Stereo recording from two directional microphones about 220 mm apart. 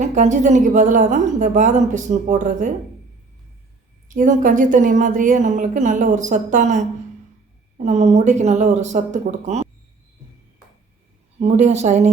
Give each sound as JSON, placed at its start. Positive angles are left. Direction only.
{"t": 0.0, "sound": "a woman's voice", "side_deg": -35}
{"t": 4.1, "sound": "a woman's voice", "side_deg": -35}
{"t": 11.3, "sound": "a woman's voice", "side_deg": -30}